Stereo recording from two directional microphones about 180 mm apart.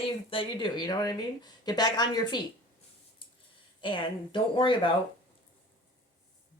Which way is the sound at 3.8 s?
25° left (ahead or behind).